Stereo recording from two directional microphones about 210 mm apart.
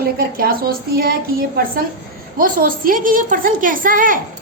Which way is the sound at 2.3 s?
40° right (ahead or behind).